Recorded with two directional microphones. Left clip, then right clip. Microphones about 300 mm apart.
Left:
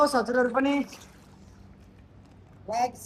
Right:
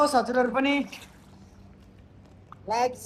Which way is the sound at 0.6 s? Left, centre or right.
Centre.